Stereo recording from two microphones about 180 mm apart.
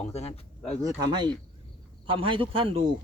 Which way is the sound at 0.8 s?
20° right (ahead or behind).